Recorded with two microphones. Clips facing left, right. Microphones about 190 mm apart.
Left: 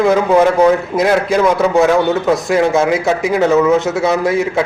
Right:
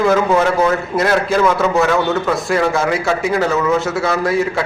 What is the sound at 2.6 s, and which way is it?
Speech, 20° left (ahead or behind).